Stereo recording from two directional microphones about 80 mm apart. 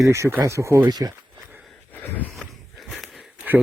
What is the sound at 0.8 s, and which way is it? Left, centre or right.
Speech, right.